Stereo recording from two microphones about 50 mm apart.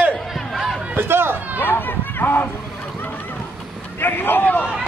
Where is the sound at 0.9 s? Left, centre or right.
Right.